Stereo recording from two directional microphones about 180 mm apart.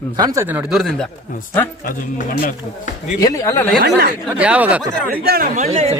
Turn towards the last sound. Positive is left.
turn(degrees=-35)  # may be behind; listen again after turning